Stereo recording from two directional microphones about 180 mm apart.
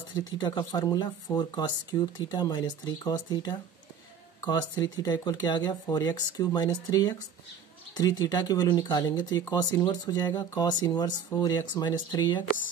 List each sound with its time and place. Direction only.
0.1 s speech: 20° left (ahead or behind)